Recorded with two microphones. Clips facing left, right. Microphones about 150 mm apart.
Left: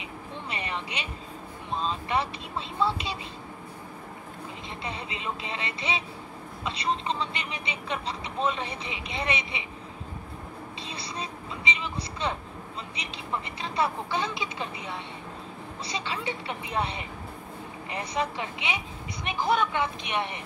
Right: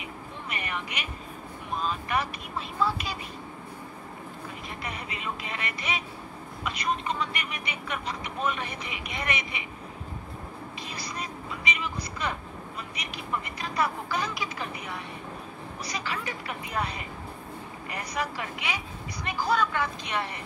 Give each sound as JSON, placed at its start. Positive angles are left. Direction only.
{"t": 0.5, "sound": "vehicle", "side_deg": 30}
{"t": 1.7, "sound": "speech", "side_deg": 25}
{"t": 4.8, "sound": "speech", "side_deg": 25}
{"t": 10.9, "sound": "vehicle", "side_deg": 25}
{"t": 13.0, "sound": "speech", "side_deg": 25}